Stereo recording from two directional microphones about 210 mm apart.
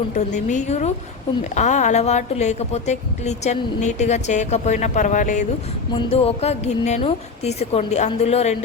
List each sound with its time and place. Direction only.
0.3 s speech: 35° left (ahead or behind)